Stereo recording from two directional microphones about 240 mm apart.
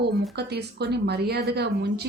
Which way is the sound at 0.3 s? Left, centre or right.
Right.